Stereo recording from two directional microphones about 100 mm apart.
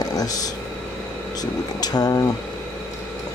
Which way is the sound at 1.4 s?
40° left (ahead or behind).